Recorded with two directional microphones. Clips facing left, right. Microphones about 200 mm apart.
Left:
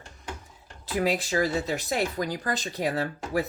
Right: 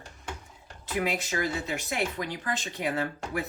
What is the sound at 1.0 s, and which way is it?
Speech, 35° left (ahead or behind).